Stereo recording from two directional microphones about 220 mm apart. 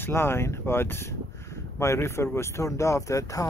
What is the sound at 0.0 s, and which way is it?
Speech, 10° left (ahead or behind).